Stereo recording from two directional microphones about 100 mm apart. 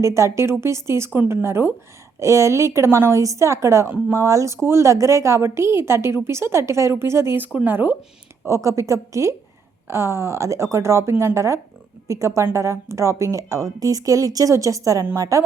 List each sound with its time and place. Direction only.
0.0 s speech: 30° right (ahead or behind)
8.4 s speech: 30° right (ahead or behind)